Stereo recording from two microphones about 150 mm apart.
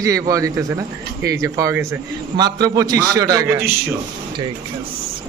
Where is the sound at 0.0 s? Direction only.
20° right (ahead or behind).